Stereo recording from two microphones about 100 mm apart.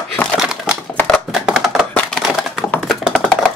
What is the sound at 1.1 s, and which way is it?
Music, centre (ahead or behind).